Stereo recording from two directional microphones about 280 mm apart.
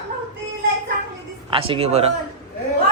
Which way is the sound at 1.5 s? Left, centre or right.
Centre.